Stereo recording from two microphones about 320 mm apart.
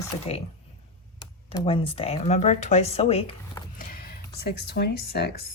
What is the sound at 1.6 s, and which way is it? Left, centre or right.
Speech, centre.